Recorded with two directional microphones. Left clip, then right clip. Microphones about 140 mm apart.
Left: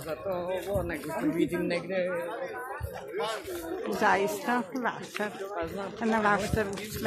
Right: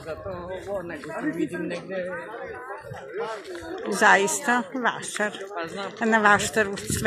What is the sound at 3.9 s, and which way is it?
Speech, 25° right (ahead or behind).